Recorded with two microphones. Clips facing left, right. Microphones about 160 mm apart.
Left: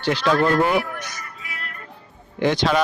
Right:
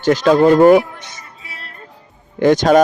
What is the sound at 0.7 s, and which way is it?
Music, 20° right (ahead or behind).